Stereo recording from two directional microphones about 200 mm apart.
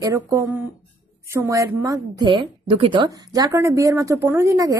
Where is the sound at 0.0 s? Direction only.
15° right (ahead or behind).